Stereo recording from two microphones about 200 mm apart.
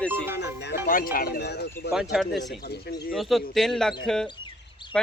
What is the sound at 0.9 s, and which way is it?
Speech, 45° left (ahead or behind).